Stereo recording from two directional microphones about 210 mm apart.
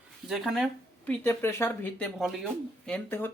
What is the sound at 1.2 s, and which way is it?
Speech, 10° left (ahead or behind).